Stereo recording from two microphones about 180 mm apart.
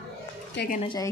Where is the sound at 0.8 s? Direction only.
25° left (ahead or behind).